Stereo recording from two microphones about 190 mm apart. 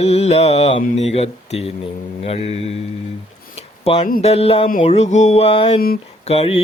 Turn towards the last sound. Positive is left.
turn(degrees=30)  # may be behind; listen again after turning